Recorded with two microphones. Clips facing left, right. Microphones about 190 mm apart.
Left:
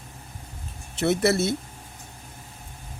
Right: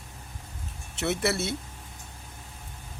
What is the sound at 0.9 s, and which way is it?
Speech, 35° left (ahead or behind).